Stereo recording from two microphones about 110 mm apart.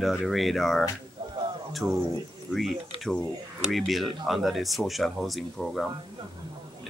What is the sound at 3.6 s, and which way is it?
Speech, centre (ahead or behind).